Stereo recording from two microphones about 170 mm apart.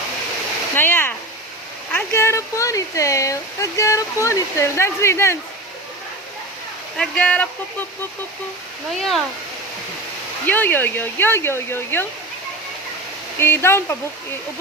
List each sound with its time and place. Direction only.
0.8 s speech: 10° left (ahead or behind)
6.9 s speech: 5° left (ahead or behind)
9.0 s speech: centre (ahead or behind)
10.4 s speech: 10° left (ahead or behind)
13.4 s speech: 15° left (ahead or behind)